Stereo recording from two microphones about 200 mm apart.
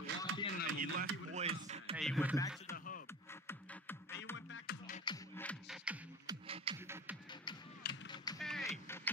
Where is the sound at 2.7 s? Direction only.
45° left (ahead or behind).